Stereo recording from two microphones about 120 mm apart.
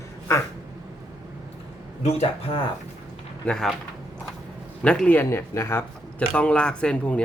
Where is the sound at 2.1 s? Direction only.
65° left (ahead or behind).